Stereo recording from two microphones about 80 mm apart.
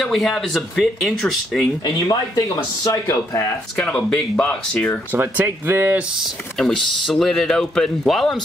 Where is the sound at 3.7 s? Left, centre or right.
Centre.